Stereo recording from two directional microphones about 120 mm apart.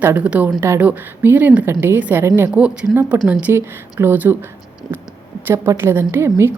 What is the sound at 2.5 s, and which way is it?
A woman's voice, 10° right (ahead or behind).